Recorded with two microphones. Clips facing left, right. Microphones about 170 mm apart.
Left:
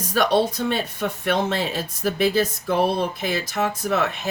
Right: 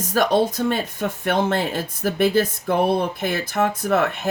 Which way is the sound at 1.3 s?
55° right (ahead or behind).